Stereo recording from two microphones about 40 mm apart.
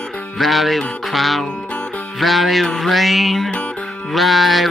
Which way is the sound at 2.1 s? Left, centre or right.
Centre.